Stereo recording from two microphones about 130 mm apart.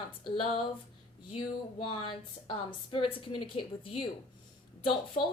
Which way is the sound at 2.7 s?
40° left (ahead or behind).